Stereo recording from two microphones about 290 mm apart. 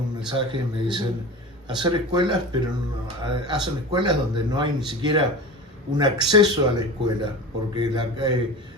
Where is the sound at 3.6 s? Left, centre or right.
Centre.